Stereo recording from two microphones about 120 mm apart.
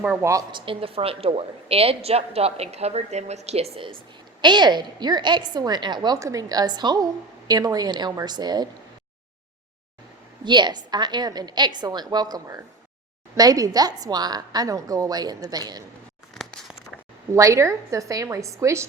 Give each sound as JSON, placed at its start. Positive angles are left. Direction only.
{"t": 0.2, "sound": "a woman's voice", "side_deg": -25}
{"t": 0.5, "sound": "a woman's voice", "side_deg": -50}
{"t": 4.4, "sound": "a woman's voice", "side_deg": -40}
{"t": 10.4, "sound": "a woman's voice", "side_deg": -40}
{"t": 16.4, "sound": "a sound", "side_deg": 0}
{"t": 17.3, "sound": "a woman's voice", "side_deg": -25}